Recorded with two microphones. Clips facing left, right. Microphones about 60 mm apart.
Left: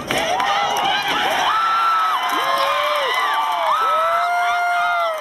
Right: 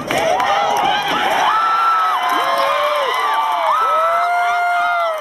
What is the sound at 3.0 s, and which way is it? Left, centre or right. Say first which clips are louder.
Crowd: right 2 dB; centre.